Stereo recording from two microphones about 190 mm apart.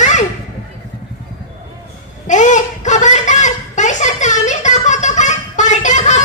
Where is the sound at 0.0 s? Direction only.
40° left (ahead or behind).